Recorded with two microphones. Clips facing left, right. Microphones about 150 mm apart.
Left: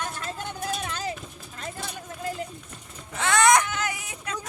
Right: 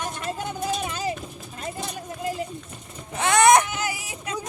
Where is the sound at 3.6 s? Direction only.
5° right (ahead or behind).